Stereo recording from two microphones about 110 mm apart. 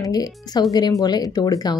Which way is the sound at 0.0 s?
35° left (ahead or behind).